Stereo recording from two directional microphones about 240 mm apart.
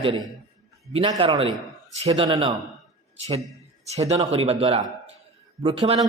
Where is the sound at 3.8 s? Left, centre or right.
Right.